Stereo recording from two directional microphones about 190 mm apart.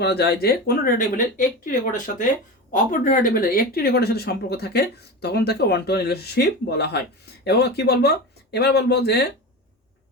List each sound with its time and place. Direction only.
0.0 s speech: 60° left (ahead or behind)